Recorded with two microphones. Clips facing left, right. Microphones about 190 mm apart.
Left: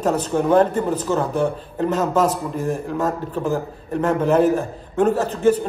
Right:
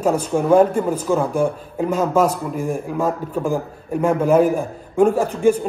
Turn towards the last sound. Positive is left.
turn(degrees=-10)  # may be behind; listen again after turning